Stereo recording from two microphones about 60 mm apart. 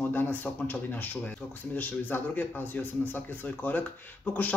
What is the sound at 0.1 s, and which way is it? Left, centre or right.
Speech, left.